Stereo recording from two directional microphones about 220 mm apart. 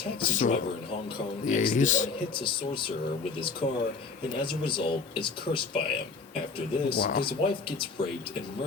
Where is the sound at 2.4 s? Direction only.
20° left (ahead or behind).